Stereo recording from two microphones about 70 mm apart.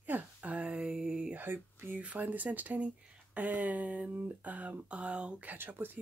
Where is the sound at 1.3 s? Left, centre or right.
Right.